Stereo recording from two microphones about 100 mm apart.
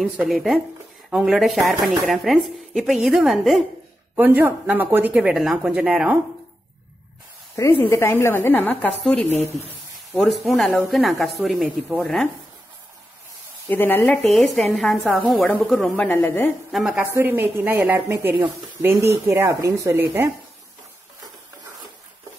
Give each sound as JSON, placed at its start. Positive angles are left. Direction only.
{"t": 0.2, "sound": "speech", "side_deg": 0}
{"t": 4.1, "sound": "speech", "side_deg": -20}
{"t": 7.7, "sound": "a woman's voice", "side_deg": 25}
{"t": 9.0, "sound": "speech", "side_deg": 5}
{"t": 13.7, "sound": "a woman's voice", "side_deg": 20}
{"t": 14.3, "sound": "a woman's voice", "side_deg": 0}
{"t": 16.0, "sound": "a woman's voice", "side_deg": 20}
{"t": 16.7, "sound": "speech", "side_deg": -5}
{"t": 17.0, "sound": "speech", "side_deg": -25}